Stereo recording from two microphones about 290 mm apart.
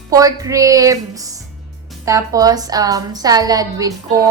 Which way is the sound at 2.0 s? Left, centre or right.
Centre.